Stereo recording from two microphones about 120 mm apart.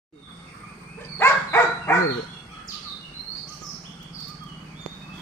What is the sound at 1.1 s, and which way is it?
Dog, 20° left (ahead or behind).